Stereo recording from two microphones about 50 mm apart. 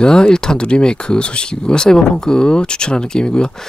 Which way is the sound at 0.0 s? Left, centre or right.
Centre.